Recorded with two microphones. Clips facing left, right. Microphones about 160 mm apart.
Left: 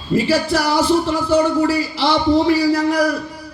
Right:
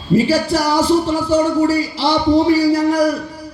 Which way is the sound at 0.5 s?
35° right (ahead or behind).